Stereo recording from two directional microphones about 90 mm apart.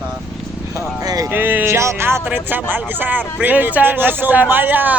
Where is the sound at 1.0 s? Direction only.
40° right (ahead or behind).